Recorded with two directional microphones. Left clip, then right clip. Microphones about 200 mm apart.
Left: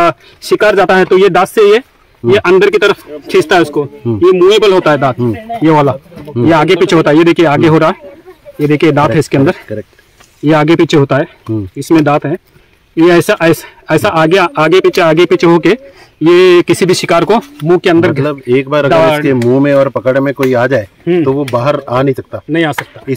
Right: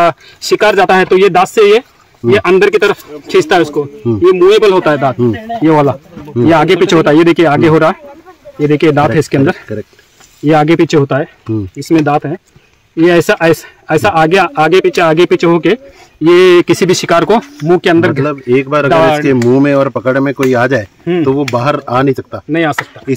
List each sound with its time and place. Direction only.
0.0 s speech: 25° left (ahead or behind)
5.6 s speech: 10° left (ahead or behind)